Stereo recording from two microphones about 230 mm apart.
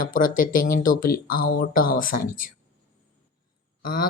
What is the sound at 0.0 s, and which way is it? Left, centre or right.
Speech, left.